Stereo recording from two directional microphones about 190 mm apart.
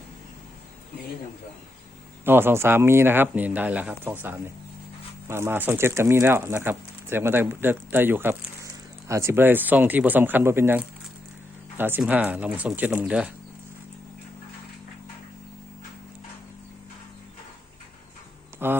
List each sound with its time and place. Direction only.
2.2 s speech: 10° right (ahead or behind)
18.6 s speech: 10° right (ahead or behind)